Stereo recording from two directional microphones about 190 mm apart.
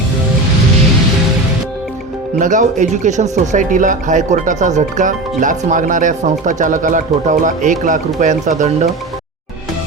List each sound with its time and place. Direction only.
2.4 s speech: 40° right (ahead or behind)